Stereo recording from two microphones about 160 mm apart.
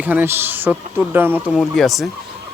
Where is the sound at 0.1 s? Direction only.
15° right (ahead or behind).